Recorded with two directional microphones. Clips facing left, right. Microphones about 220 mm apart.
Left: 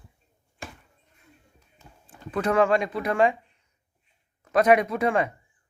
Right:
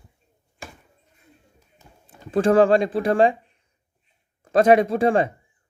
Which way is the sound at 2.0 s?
30° right (ahead or behind).